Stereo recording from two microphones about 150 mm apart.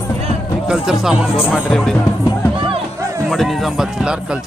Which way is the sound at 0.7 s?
5° right (ahead or behind).